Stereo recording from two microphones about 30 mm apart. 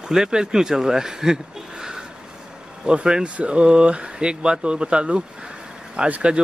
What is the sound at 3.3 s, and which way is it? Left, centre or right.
Speech, right.